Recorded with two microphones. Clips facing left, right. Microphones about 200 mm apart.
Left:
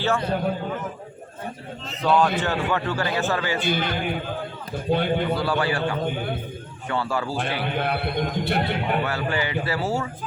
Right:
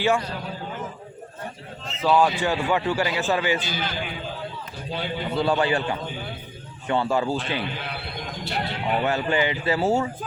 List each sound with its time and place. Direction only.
0.3 s a man's voice: 55° left (ahead or behind)
1.9 s a man's voice: 5° right (ahead or behind); by 3.6 s 20° right (ahead or behind)
3.6 s a man's voice: 55° left (ahead or behind)
5.4 s a man's voice: 20° right (ahead or behind)
6.1 s a man's voice: 55° left (ahead or behind)
6.8 s a man's voice: 20° right (ahead or behind)
7.6 s a man's voice: 55° left (ahead or behind)
9.0 s a man's voice: 20° right (ahead or behind)